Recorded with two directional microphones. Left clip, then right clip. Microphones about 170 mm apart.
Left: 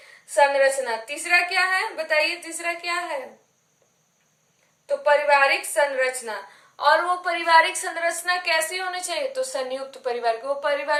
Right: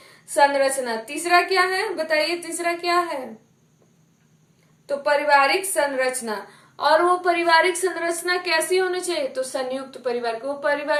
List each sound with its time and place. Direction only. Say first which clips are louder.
0.3 s a woman's voice: even; 35° right (ahead or behind)
4.9 s a woman's voice: even; 35° right (ahead or behind); by 10.9 s 5° right (ahead or behind)